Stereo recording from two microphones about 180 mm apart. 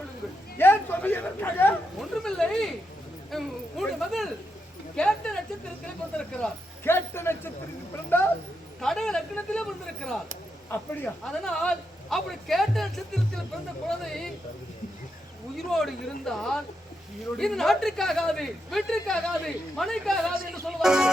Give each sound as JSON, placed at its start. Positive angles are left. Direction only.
{"t": 0.6, "sound": "speech", "side_deg": 10}
{"t": 8.8, "sound": "speech", "side_deg": 5}
{"t": 15.5, "sound": "speech", "side_deg": 0}